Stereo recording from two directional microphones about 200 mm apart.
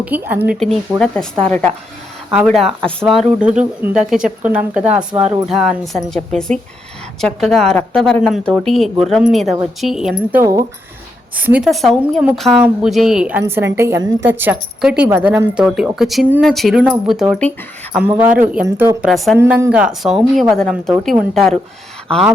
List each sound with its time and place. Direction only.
0.0 s a woman's voice: 10° right (ahead or behind)
3.2 s a woman's voice: 5° right (ahead or behind)
5.1 s speech: 25° right (ahead or behind)
5.5 s a woman's voice: centre (ahead or behind)
10.4 s a woman's voice: 15° right (ahead or behind)
19.0 s a woman's voice: centre (ahead or behind)
19.4 s a woman's voice: 10° right (ahead or behind)